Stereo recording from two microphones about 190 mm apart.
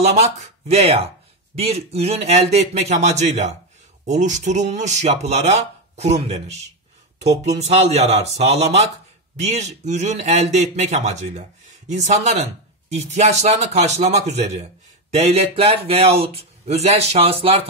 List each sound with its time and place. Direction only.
0.0 s speech: 35° right (ahead or behind)